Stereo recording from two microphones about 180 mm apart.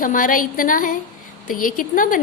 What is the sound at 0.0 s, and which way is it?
A woman's voice, 50° left (ahead or behind).